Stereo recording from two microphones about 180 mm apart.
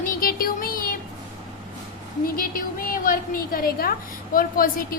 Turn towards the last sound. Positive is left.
turn(degrees=50)  # may be behind; listen again after turning